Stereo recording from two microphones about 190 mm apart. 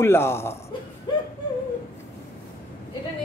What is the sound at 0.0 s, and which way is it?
Speech, 15° left (ahead or behind).